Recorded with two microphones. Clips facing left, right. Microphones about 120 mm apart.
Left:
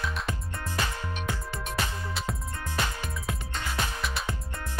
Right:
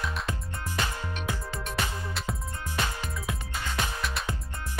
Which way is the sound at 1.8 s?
Centre (ahead or behind).